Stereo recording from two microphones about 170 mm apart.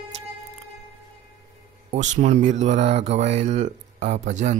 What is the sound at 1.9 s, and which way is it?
Speech, 45° right (ahead or behind).